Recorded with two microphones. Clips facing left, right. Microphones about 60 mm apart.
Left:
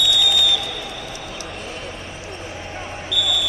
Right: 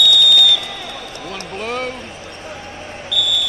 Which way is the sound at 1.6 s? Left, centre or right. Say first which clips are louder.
Right 9 dB; right.